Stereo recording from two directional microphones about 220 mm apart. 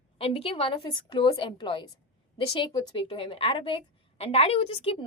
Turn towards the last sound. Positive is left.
turn(degrees=25)  # may be behind; listen again after turning